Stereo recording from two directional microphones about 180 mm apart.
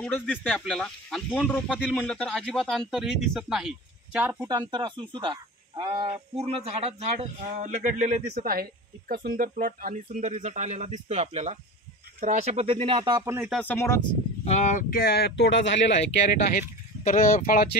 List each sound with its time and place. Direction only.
0.4 s speech: 5° left (ahead or behind)
4.5 s speech: 25° right (ahead or behind)
13.5 s speech: 10° left (ahead or behind)
14.4 s speech: 40° left (ahead or behind); by 16.0 s 90° left
16.3 s speech: 45° left (ahead or behind)